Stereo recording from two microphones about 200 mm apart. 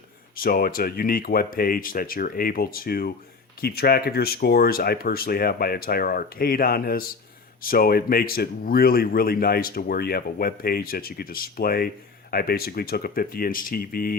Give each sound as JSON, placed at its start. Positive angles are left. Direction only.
{"t": 0.3, "sound": "speech", "side_deg": 45}